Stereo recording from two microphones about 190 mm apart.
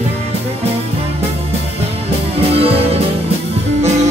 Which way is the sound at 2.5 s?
30° right (ahead or behind).